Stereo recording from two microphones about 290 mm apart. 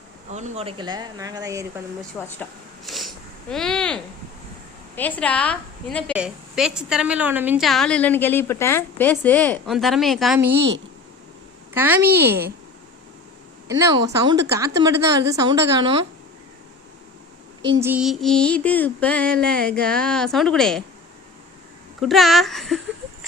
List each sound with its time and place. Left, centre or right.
0.3 s speech: right
2.1 s a sound: centre
3.5 s a woman's voice: centre
10.4 s a woman's voice: right
11.7 s speech: centre
12.0 s a woman's voice: right
13.7 s speech: centre
17.7 s a woman's voice: centre
22.0 s a woman's voice: centre